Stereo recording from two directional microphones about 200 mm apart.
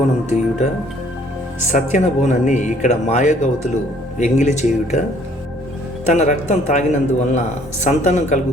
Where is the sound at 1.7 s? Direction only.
35° left (ahead or behind).